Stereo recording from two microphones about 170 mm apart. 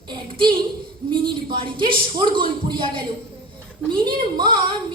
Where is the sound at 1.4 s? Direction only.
30° right (ahead or behind).